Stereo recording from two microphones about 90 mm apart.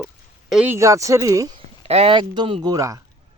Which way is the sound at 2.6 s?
40° right (ahead or behind).